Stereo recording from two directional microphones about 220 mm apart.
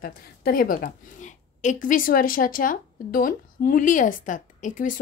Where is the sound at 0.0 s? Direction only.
40° left (ahead or behind).